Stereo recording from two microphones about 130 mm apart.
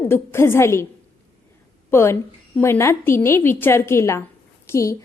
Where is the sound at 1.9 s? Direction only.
20° left (ahead or behind).